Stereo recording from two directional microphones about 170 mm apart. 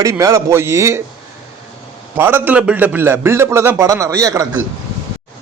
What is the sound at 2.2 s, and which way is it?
A man's voice, 10° right (ahead or behind).